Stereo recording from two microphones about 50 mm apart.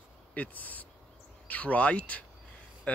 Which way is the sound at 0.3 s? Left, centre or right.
Left.